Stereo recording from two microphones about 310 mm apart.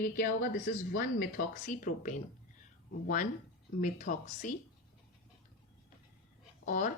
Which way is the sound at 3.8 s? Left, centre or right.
Left.